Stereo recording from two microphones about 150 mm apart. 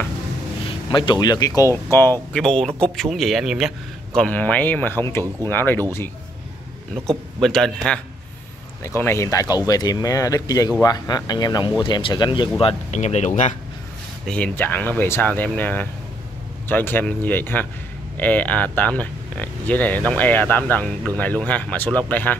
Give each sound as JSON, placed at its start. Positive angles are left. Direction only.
{"t": 0.7, "sound": "speech", "side_deg": 30}
{"t": 2.3, "sound": "a man's voice", "side_deg": 5}
{"t": 7.1, "sound": "a man's voice", "side_deg": 0}
{"t": 8.8, "sound": "speech", "side_deg": 15}
{"t": 12.9, "sound": "speech", "side_deg": 50}
{"t": 14.2, "sound": "speech", "side_deg": 10}